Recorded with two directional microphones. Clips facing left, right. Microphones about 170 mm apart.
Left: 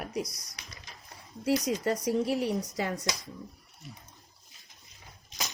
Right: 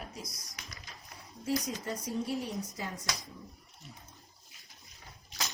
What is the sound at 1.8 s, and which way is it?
Speech, 70° left (ahead or behind).